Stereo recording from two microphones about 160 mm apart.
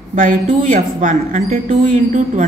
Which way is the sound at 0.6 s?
60° right (ahead or behind).